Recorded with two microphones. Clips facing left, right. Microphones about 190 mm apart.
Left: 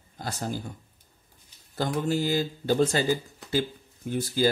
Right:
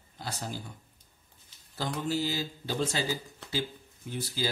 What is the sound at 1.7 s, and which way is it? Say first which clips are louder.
Speech: left 5 dB; 50° left (ahead or behind).